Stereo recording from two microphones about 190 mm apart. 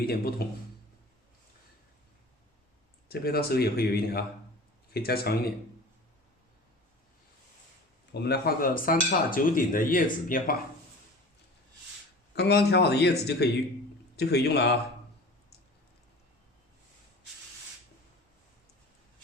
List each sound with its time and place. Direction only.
0.0 s speech: 55° left (ahead or behind)
3.1 s speech: 55° left (ahead or behind)
8.1 s speech: 60° left (ahead or behind)
12.3 s speech: 60° left (ahead or behind)